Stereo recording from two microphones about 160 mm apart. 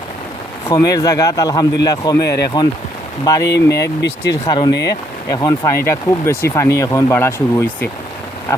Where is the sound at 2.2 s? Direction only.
90° left.